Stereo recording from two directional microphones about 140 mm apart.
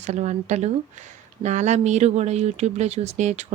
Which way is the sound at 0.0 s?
55° right (ahead or behind).